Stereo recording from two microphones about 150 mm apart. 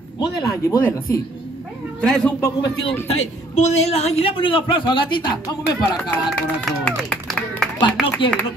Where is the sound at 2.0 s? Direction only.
5° left (ahead or behind).